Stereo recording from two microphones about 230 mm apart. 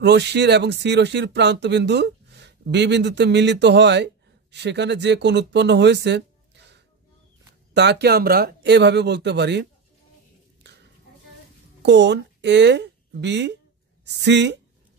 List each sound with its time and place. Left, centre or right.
0.0 s speech: right
11.8 s speech: right